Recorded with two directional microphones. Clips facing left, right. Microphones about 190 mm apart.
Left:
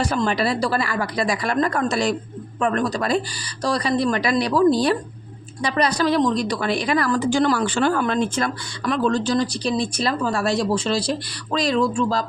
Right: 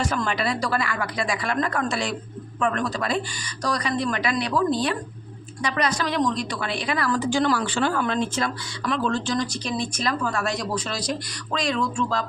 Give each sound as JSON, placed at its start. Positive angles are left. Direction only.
{"t": 0.0, "sound": "a woman's voice", "side_deg": 35}